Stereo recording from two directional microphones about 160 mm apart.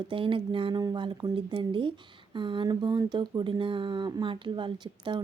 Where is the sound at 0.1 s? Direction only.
35° right (ahead or behind).